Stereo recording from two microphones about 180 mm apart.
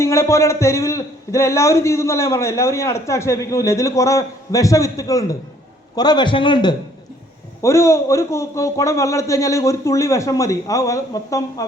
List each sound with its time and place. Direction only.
0.0 s a man's voice: 15° left (ahead or behind)